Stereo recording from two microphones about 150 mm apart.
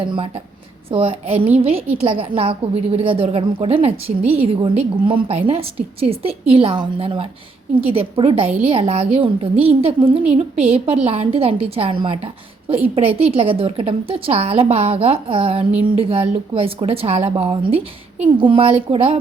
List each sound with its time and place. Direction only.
0.9 s a woman's voice: 40° right (ahead or behind)